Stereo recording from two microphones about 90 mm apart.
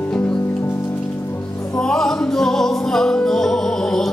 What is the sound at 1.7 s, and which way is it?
Music, 5° left (ahead or behind).